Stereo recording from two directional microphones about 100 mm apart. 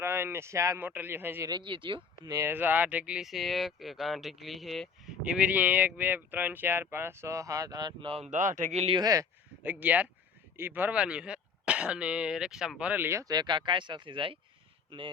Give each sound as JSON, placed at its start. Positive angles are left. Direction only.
{"t": 0.0, "sound": "a sound", "side_deg": -25}
{"t": 0.8, "sound": "speech", "side_deg": -20}
{"t": 1.5, "sound": "speech", "side_deg": -50}
{"t": 2.2, "sound": "speech", "side_deg": -35}
{"t": 2.5, "sound": "speech", "side_deg": -20}
{"t": 5.2, "sound": "speech", "side_deg": -10}
{"t": 8.0, "sound": "speech", "side_deg": -75}
{"t": 8.7, "sound": "speech", "side_deg": -90}
{"t": 9.0, "sound": "speech", "side_deg": -40}
{"t": 9.6, "sound": "speech", "side_deg": -15}
{"t": 12.9, "sound": "speech", "side_deg": -25}
{"t": 13.2, "sound": "speech", "side_deg": -45}